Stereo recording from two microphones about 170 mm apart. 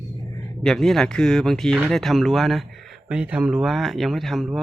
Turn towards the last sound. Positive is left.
turn(degrees=0)  # may be behind; listen again after turning